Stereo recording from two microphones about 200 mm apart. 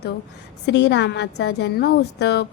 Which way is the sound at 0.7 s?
60° left (ahead or behind).